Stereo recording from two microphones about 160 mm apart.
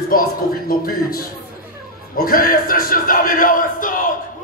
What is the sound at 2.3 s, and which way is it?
Speech, 60° left (ahead or behind).